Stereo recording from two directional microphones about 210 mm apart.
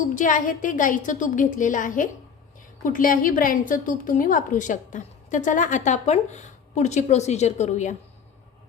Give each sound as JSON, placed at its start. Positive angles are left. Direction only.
{"t": 0.1, "sound": "a woman's voice", "side_deg": 40}